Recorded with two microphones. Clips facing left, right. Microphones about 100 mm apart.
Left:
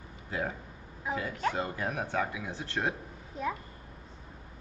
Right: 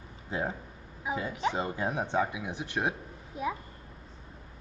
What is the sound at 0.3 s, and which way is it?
Speech, 25° right (ahead or behind).